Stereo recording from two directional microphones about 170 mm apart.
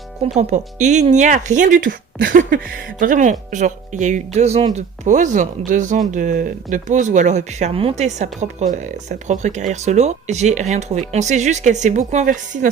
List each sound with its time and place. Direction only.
0.3 s speech: 45° right (ahead or behind)